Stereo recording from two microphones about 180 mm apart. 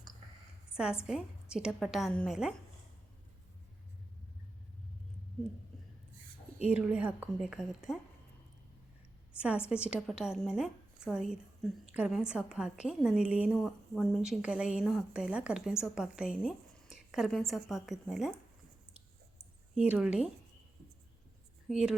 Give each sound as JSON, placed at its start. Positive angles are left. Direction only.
{"t": 1.0, "sound": "a woman's voice", "side_deg": -5}
{"t": 6.6, "sound": "a woman's voice", "side_deg": -5}
{"t": 9.4, "sound": "a woman's voice", "side_deg": -5}
{"t": 19.7, "sound": "a woman's voice", "side_deg": -5}
{"t": 21.7, "sound": "a woman's voice", "side_deg": -5}